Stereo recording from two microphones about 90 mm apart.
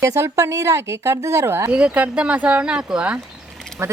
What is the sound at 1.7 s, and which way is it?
Speech, 15° right (ahead or behind).